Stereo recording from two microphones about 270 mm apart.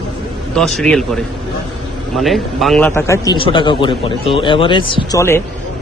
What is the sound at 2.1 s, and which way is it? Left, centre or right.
A man's voice, centre.